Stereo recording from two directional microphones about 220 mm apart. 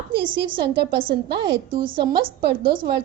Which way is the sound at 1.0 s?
50° right (ahead or behind).